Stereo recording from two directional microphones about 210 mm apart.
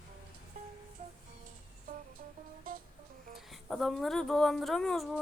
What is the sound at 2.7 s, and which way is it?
Music, 45° right (ahead or behind).